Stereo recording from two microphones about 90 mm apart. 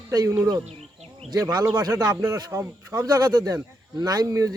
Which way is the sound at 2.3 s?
35° right (ahead or behind).